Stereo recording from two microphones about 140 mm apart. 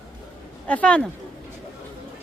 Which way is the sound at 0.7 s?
10° left (ahead or behind).